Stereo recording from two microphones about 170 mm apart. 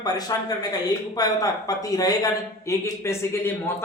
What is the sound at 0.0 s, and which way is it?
A man's voice, 25° left (ahead or behind).